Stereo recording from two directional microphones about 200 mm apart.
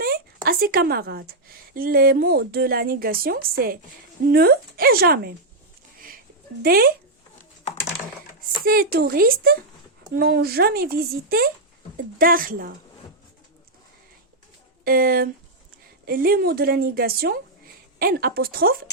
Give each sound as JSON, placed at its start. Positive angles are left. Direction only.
{"t": 0.4, "sound": "a woman's voice", "side_deg": -50}
{"t": 6.6, "sound": "a woman's voice", "side_deg": -50}
{"t": 8.6, "sound": "a woman's voice", "side_deg": -50}
{"t": 14.8, "sound": "a woman's voice", "side_deg": -45}